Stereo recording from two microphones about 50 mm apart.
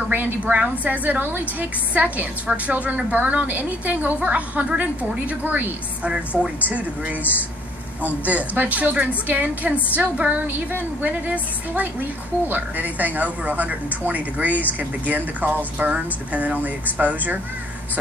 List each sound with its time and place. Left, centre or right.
0.1 s a woman's voice: right
6.0 s a woman's voice: right